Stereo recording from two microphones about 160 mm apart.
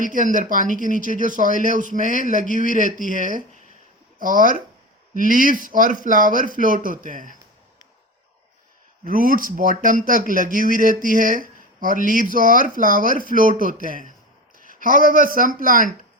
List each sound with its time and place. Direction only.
0.0 s speech: 55° right (ahead or behind)
9.0 s speech: 60° right (ahead or behind)